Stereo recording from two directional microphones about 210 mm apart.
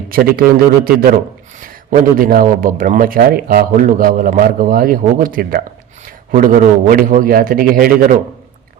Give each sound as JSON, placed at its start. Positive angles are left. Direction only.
{"t": 0.1, "sound": "a man's voice", "side_deg": -45}